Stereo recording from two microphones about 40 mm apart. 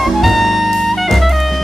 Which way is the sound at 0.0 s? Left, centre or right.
Centre.